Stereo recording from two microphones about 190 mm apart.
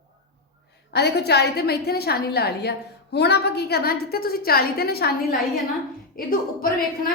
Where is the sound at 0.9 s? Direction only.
60° left (ahead or behind).